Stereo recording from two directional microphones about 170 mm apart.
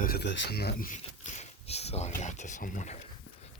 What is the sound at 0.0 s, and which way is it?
Speech, 70° left (ahead or behind).